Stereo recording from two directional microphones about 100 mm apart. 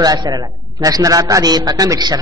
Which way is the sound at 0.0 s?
40° right (ahead or behind).